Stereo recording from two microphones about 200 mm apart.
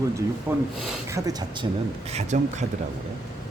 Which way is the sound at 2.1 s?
35° right (ahead or behind).